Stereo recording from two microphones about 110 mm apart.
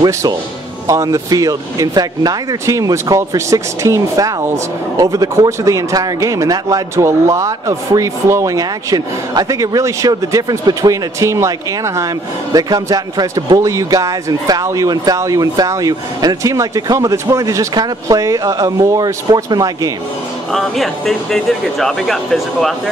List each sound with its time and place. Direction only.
0.0 s a man's voice: 40° right (ahead or behind)
20.5 s speech: centre (ahead or behind)